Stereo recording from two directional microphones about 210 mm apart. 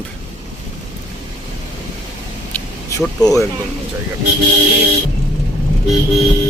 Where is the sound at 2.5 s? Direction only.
15° left (ahead or behind).